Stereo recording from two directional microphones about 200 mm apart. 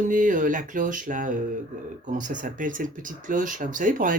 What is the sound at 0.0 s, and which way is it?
Speech, 40° right (ahead or behind).